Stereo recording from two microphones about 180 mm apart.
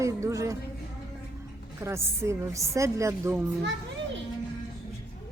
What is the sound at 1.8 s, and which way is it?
A woman's voice, 15° right (ahead or behind).